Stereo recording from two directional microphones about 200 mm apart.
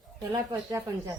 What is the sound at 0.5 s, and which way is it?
Speech, 15° right (ahead or behind).